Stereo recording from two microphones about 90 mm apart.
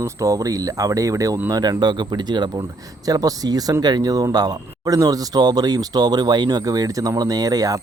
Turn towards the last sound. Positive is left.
turn(degrees=-45)  # may be behind; listen again after turning